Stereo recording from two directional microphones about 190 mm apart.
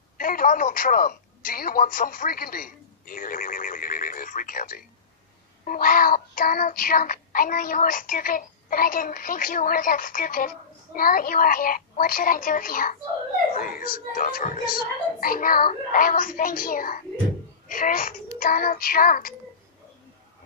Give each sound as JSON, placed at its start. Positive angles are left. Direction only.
{"t": 0.2, "sound": "speech", "side_deg": 45}
{"t": 5.7, "sound": "child singing", "side_deg": 50}
{"t": 13.6, "sound": "speech", "side_deg": 45}
{"t": 15.1, "sound": "child singing", "side_deg": 50}